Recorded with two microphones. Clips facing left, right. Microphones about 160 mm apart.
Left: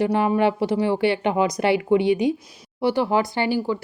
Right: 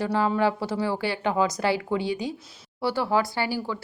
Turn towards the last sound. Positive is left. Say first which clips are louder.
# left 6 dB
turn(degrees=20)  # may be behind; listen again after turning